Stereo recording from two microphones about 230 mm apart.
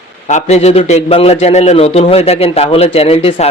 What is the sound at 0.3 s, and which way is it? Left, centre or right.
A man's voice, left.